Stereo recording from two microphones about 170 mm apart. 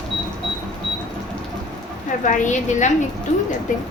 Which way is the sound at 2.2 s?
45° left (ahead or behind).